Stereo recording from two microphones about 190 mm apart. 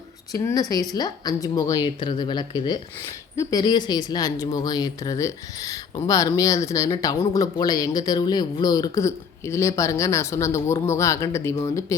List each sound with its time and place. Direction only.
0.3 s speech: 20° left (ahead or behind)